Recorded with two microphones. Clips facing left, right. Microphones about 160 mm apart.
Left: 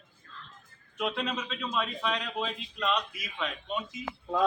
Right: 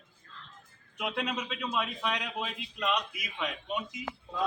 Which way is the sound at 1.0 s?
10° right (ahead or behind).